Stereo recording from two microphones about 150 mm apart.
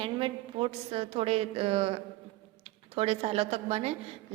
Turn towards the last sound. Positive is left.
turn(degrees=-45)  # may be behind; listen again after turning